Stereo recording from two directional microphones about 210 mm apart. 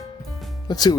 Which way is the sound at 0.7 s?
20° left (ahead or behind).